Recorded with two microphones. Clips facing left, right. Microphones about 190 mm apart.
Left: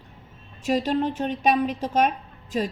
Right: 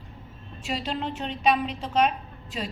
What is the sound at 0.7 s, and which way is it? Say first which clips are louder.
A woman's voice: left 7 dB; 45° left (ahead or behind).